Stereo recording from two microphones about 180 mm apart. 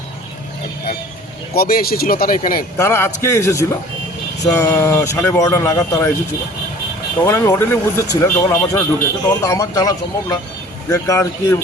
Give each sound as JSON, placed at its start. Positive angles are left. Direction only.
{"t": 1.5, "sound": "speech", "side_deg": 55}
{"t": 2.7, "sound": "speech", "side_deg": 15}
{"t": 7.3, "sound": "speech", "side_deg": 15}